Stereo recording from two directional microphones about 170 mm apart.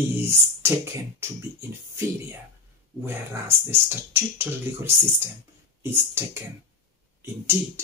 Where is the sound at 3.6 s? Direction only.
10° right (ahead or behind).